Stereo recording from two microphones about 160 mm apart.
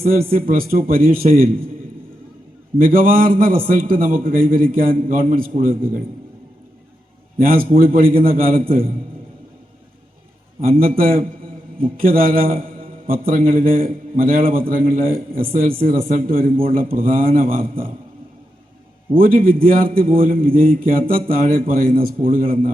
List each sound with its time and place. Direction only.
0.3 s a man's voice: 65° right (ahead or behind)
2.7 s a man's voice: 65° right (ahead or behind)
7.3 s a man's voice: 65° right (ahead or behind)
10.6 s a man's voice: 65° right (ahead or behind)
19.1 s a man's voice: 65° right (ahead or behind)